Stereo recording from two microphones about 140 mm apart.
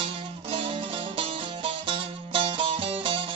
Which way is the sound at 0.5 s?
40° right (ahead or behind).